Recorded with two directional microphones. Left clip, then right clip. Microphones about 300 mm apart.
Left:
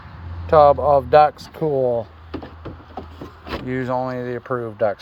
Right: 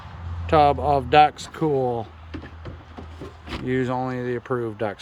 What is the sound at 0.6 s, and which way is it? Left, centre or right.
Speech, centre.